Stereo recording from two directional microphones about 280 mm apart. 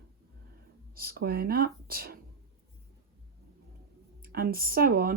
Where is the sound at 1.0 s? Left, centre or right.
Right.